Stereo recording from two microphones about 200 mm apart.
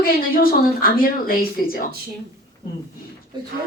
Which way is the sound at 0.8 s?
45° left (ahead or behind).